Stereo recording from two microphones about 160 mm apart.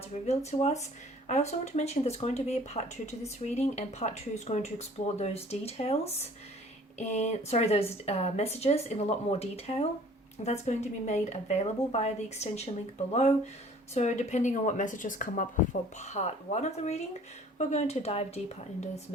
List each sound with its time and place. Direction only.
0.1 s a woman's voice: 45° left (ahead or behind)
16.0 s a woman's voice: 45° left (ahead or behind)